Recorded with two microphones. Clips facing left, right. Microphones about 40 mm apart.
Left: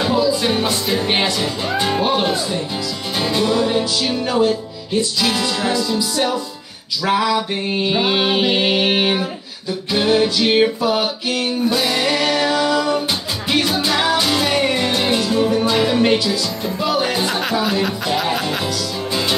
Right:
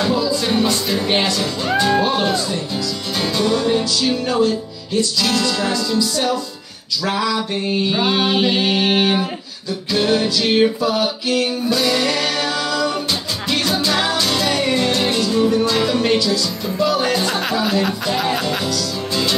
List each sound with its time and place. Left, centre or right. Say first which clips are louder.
0.0 s music: left 2 dB; centre
17.4 s speech: even; centre
18.7 s music: even; centre